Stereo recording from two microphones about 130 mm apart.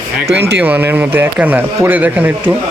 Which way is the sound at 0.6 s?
15° right (ahead or behind).